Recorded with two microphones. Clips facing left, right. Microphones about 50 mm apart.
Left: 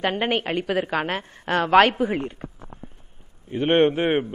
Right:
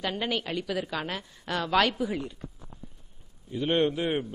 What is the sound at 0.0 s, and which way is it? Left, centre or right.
A man's voice, left.